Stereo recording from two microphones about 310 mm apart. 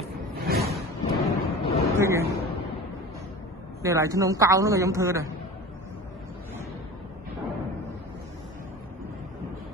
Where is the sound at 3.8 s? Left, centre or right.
Centre.